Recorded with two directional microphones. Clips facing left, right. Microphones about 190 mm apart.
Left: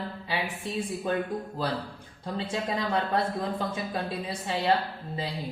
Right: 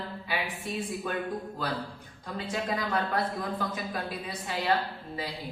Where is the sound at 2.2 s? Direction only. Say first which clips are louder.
Left 2 dB; 25° left (ahead or behind).